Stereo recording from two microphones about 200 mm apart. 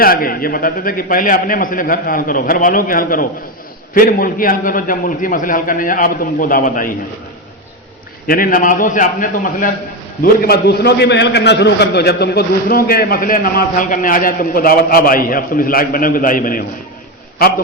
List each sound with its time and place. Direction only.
0.0 s a man's voice: 45° left (ahead or behind)
8.3 s a man's voice: 45° left (ahead or behind)